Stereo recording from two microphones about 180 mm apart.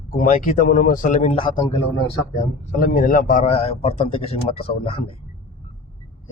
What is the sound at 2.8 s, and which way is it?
Speech, 50° left (ahead or behind).